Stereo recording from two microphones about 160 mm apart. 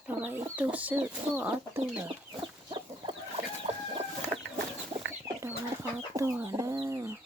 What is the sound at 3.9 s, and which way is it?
Chicken, 40° right (ahead or behind).